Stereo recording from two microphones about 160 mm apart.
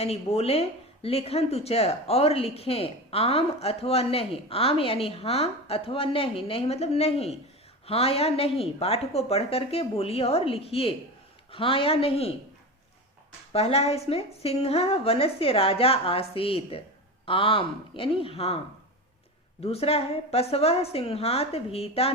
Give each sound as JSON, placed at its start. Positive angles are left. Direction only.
{"t": 0.0, "sound": "speech", "side_deg": 40}
{"t": 13.5, "sound": "speech", "side_deg": 40}
{"t": 19.6, "sound": "speech", "side_deg": 40}